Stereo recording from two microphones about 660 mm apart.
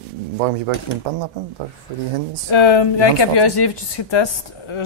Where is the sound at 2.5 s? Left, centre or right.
Left.